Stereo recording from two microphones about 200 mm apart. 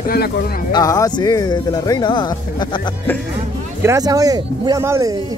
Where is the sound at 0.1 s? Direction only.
50° left (ahead or behind).